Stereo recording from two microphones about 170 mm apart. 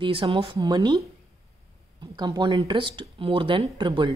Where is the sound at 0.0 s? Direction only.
30° right (ahead or behind).